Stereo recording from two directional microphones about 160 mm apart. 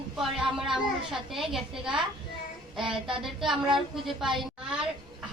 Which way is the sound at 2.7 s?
5° right (ahead or behind).